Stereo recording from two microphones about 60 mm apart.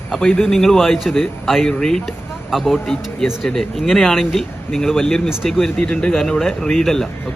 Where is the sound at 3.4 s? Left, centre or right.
Centre.